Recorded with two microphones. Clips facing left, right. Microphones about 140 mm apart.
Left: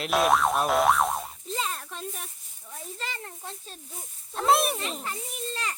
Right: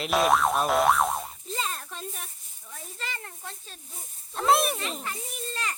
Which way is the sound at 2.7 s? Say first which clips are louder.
Left 2 dB; 25° left (ahead or behind).